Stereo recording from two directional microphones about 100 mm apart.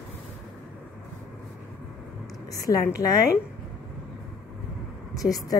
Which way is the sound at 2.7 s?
35° left (ahead or behind).